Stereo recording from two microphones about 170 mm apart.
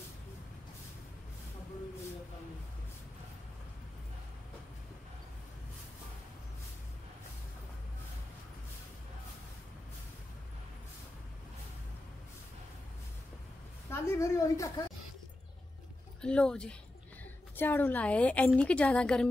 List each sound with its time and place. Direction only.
13.8 s a woman's voice: 15° left (ahead or behind)
16.2 s a woman's voice: 5° left (ahead or behind)